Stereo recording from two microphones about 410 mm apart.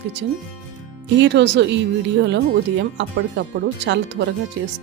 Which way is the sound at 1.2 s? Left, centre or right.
Right.